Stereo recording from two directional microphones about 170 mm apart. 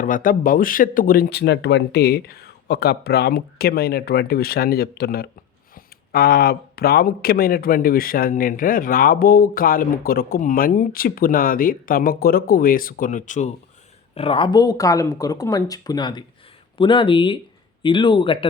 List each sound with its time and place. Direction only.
0.0 s speech: 55° left (ahead or behind)
14.2 s speech: 30° left (ahead or behind)